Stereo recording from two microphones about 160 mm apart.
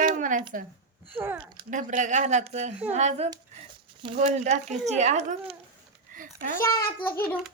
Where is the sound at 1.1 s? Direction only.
10° right (ahead or behind).